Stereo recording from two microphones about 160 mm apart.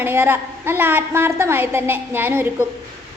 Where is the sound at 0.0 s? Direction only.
15° right (ahead or behind).